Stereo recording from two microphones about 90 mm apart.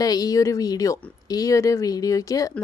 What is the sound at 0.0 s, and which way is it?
Speech, 45° left (ahead or behind).